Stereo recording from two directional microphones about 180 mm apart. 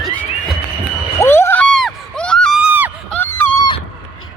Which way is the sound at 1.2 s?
15° left (ahead or behind).